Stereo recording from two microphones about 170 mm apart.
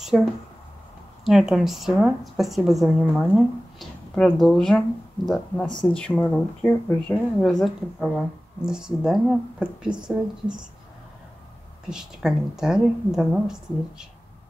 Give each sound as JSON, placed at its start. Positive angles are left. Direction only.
{"t": 0.1, "sound": "speech", "side_deg": 0}
{"t": 11.9, "sound": "speech", "side_deg": -5}